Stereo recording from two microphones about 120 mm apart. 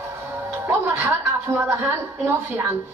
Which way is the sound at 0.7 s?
20° right (ahead or behind).